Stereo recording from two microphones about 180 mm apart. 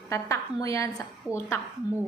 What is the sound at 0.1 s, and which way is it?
Speech, 15° left (ahead or behind).